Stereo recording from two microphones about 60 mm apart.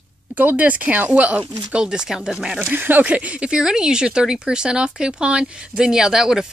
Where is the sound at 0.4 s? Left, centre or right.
Right; by 2.6 s centre.